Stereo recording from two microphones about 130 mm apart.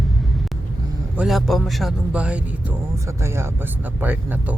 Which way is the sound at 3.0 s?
20° right (ahead or behind).